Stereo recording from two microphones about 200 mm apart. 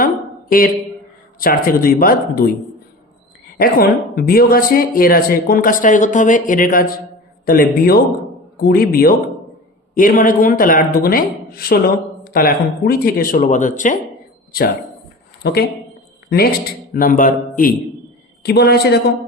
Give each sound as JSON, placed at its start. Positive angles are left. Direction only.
{"t": 0.0, "sound": "a sound", "side_deg": 45}
{"t": 1.4, "sound": "a man's voice", "side_deg": 45}
{"t": 3.6, "sound": "a man's voice", "side_deg": 50}
{"t": 15.4, "sound": "a man's voice", "side_deg": 50}
{"t": 16.9, "sound": "a man's voice", "side_deg": 45}
{"t": 18.4, "sound": "a man's voice", "side_deg": 55}